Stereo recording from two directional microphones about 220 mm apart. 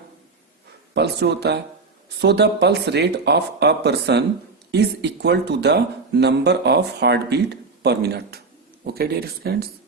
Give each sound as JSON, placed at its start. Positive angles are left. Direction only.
{"t": 0.9, "sound": "speech", "side_deg": -50}